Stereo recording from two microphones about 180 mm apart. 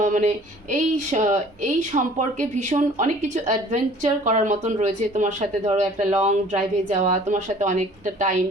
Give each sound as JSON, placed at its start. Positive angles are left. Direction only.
{"t": 0.0, "sound": "speech", "side_deg": -45}